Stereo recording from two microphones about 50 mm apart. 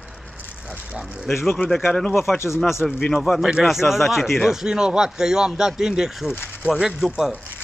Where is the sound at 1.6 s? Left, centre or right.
Left.